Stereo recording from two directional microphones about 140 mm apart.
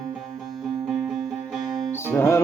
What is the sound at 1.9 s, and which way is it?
Music, 15° left (ahead or behind).